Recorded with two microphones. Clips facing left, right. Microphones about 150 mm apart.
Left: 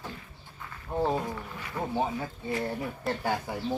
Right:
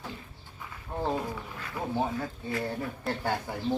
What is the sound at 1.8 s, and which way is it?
Speech, 5° right (ahead or behind).